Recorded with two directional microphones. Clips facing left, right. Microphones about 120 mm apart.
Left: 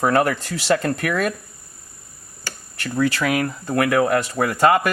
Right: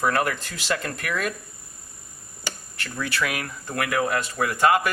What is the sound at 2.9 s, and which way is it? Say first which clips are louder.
Speech: left 8 dB; 40° left (ahead or behind).